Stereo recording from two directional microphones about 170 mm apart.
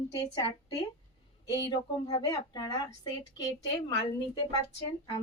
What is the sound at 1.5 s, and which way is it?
A woman's voice, 25° left (ahead or behind).